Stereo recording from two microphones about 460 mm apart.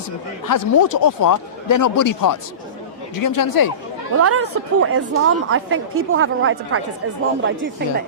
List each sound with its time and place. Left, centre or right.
0.4 s speech: left
4.1 s speech: right